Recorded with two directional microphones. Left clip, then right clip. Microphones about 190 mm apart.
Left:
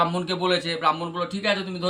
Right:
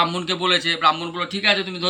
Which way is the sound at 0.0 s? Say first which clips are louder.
Right 3 dB; 30° left (ahead or behind).